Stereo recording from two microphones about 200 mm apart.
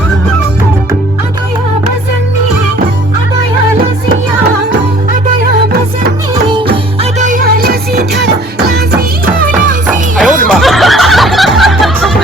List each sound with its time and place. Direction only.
6.5 s music: 30° right (ahead or behind); by 9.7 s 45° right (ahead or behind)
10.2 s snicker: centre (ahead or behind)